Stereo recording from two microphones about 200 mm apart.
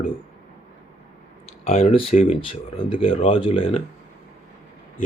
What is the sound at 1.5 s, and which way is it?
Speech, 30° left (ahead or behind).